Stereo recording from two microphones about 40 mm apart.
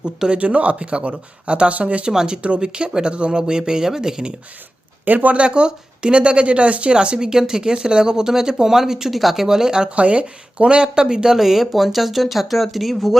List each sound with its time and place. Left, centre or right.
0.3 s speech: right; by 4.4 s centre
5.0 s speech: right
5.4 s speech: right
9.9 s speech: right
10.8 s speech: centre
11.3 s speech: centre